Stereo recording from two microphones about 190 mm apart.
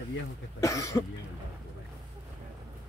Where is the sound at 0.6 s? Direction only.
15° left (ahead or behind).